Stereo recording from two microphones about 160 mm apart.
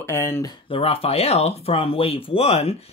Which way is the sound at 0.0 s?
15° left (ahead or behind).